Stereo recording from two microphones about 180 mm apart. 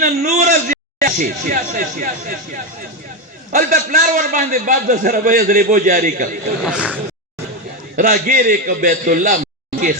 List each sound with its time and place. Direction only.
0.0 s a man's voice: 50° right (ahead or behind)
3.5 s a man's voice: 45° right (ahead or behind)
6.7 s speech: 5° right (ahead or behind)
7.9 s a man's voice: 50° right (ahead or behind)